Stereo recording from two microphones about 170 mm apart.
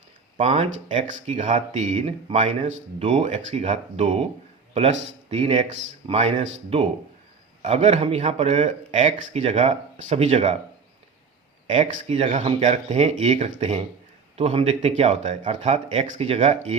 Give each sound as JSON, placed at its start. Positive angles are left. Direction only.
{"t": 0.3, "sound": "speech", "side_deg": -40}
{"t": 7.6, "sound": "speech", "side_deg": -40}
{"t": 11.7, "sound": "speech", "side_deg": -45}